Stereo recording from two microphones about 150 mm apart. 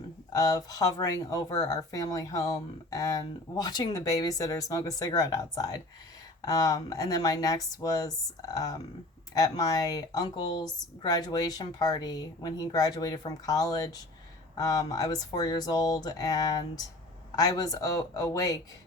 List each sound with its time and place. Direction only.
0.3 s speech: 25° left (ahead or behind)